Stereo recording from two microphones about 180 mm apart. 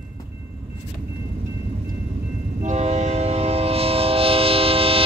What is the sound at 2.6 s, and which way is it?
Train, 35° right (ahead or behind).